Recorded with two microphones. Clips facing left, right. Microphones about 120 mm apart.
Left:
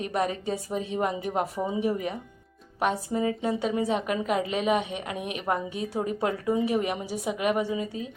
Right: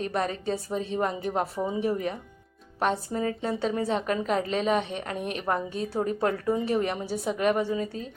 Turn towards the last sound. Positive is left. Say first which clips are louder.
# right 1 dB
turn(degrees=10)  # may be behind; listen again after turning